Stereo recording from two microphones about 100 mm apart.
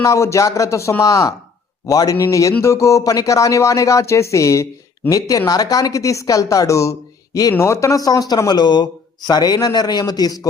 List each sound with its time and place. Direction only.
0.0 s speech: 30° left (ahead or behind)